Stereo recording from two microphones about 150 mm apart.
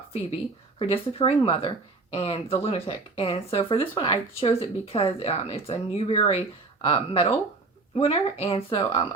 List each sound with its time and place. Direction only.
0.8 s speech: 40° left (ahead or behind)